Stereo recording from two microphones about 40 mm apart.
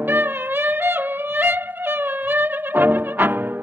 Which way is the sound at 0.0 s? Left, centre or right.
Right.